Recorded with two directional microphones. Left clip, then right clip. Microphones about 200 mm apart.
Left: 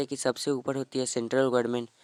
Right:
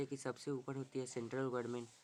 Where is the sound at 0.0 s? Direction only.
50° left (ahead or behind).